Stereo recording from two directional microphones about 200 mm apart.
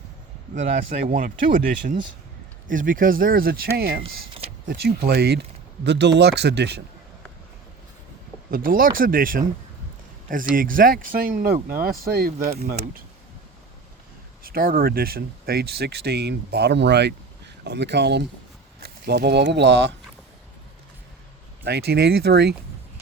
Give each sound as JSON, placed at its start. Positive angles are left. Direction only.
{"t": 1.0, "sound": "speech", "side_deg": -45}
{"t": 4.0, "sound": "speech", "side_deg": -30}
{"t": 4.7, "sound": "speech", "side_deg": -55}
{"t": 8.4, "sound": "speech", "side_deg": -45}
{"t": 10.5, "sound": "speech", "side_deg": -45}
{"t": 14.5, "sound": "speech", "side_deg": -45}
{"t": 21.6, "sound": "speech", "side_deg": -50}